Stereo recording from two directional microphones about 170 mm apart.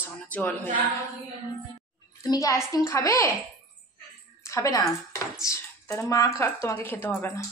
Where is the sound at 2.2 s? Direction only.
20° left (ahead or behind).